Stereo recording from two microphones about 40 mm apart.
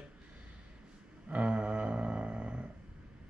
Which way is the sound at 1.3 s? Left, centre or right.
Right.